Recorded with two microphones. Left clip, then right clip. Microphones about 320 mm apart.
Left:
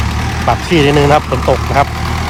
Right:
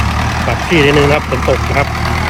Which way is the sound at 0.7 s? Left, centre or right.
Left.